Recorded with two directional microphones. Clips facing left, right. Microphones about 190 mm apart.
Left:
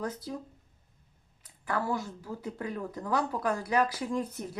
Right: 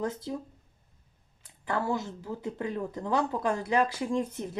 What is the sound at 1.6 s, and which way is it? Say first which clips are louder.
Speech: right 2 dB; 25° right (ahead or behind).